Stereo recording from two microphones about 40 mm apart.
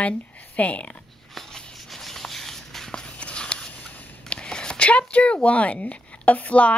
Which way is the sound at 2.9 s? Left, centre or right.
Left.